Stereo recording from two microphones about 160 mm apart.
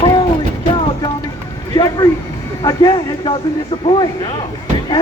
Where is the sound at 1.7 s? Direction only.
25° left (ahead or behind).